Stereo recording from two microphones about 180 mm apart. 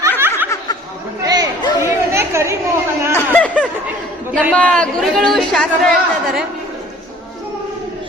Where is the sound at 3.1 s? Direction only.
10° left (ahead or behind).